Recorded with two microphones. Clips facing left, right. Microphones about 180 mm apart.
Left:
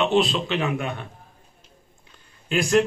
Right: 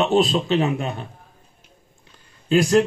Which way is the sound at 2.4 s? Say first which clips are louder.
Right 4 dB; 35° right (ahead or behind).